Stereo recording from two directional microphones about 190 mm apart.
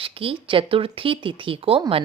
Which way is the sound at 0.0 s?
30° right (ahead or behind).